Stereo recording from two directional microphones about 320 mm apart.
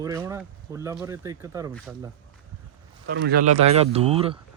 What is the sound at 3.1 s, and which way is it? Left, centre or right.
Speech, right.